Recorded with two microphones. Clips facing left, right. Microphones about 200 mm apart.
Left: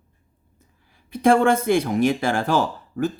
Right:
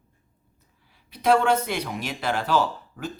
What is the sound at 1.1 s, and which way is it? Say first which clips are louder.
Speech: left 4 dB; 50° left (ahead or behind).